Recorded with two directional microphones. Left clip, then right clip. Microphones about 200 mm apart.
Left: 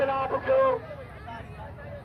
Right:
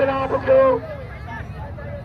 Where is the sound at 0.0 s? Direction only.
35° right (ahead or behind).